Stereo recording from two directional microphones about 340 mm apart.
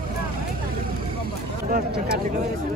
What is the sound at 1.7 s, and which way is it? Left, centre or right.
Speech, right.